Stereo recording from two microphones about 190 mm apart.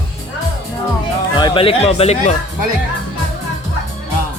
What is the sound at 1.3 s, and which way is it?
Music, 25° left (ahead or behind).